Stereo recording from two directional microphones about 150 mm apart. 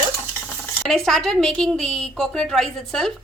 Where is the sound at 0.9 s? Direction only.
Centre (ahead or behind).